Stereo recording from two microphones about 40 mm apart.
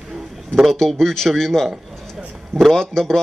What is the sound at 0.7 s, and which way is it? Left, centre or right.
Speech, centre.